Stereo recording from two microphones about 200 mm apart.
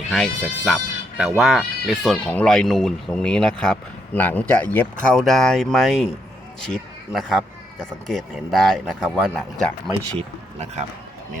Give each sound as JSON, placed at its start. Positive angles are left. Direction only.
{"t": 0.1, "sound": "speech", "side_deg": 0}
{"t": 10.2, "sound": "a man's voice", "side_deg": -35}